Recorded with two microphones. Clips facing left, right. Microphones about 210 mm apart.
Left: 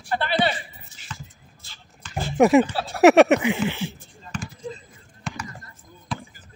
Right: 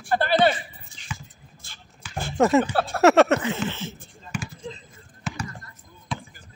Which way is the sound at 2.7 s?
50° right (ahead or behind).